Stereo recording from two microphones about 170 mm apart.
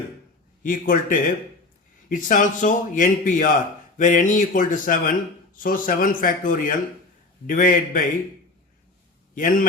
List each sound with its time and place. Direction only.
0.6 s a man's voice: 55° left (ahead or behind)
9.3 s a man's voice: 50° left (ahead or behind)